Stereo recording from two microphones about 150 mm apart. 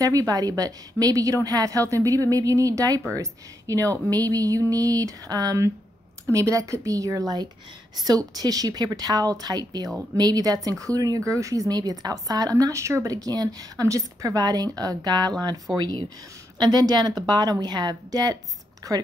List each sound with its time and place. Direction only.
0.0 s speech: 25° right (ahead or behind)